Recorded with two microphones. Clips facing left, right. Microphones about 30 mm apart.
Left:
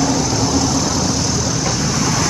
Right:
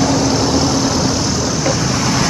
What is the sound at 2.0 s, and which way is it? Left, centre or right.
Vehicle, right.